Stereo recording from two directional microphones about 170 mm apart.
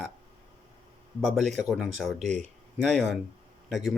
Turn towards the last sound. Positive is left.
turn(degrees=0)  # may be behind; listen again after turning